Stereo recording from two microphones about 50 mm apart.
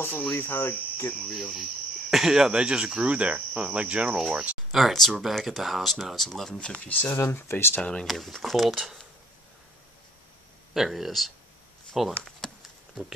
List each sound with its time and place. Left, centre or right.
0.4 s cricket: left
1.5 s speech: centre
2.6 s cricket: centre
4.7 s speech: centre
6.6 s speech: left
6.9 s speech: left
7.2 s speech: left
7.8 s speech: centre
8.1 s speech: centre
10.7 s speech: centre